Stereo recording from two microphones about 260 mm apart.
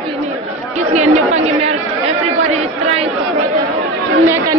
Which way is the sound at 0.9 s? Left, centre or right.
Right.